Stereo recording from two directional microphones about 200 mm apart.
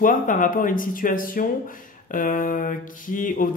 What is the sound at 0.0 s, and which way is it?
Speech, 40° left (ahead or behind).